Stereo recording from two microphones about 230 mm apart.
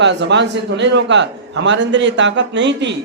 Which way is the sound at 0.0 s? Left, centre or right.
Right.